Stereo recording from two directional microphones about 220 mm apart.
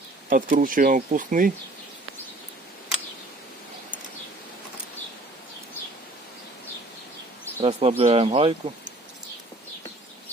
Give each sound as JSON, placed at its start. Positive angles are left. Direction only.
{"t": 0.3, "sound": "speech", "side_deg": -40}
{"t": 7.6, "sound": "speech", "side_deg": -30}